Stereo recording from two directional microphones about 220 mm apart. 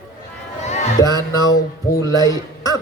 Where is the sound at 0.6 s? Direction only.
30° left (ahead or behind).